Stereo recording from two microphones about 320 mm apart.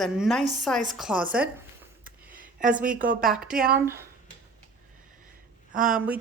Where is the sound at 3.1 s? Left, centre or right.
Centre.